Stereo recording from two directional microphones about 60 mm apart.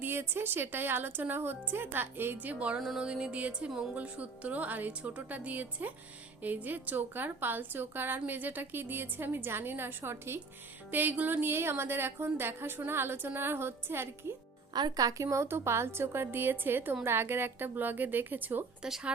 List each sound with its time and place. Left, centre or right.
0.0 s a woman's voice: right
3.0 s music: centre
3.9 s a woman's voice: right
10.9 s a woman's voice: right
14.9 s a woman's voice: right
18.8 s speech: centre